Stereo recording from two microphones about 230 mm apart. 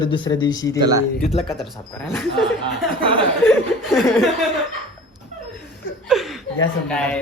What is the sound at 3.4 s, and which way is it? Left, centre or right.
Chuckle, centre.